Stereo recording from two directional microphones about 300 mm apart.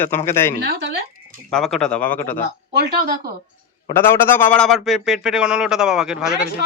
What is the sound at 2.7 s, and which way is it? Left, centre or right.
Speech, right.